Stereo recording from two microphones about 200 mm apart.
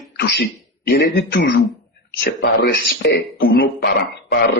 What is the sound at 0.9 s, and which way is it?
Speech, 55° left (ahead or behind).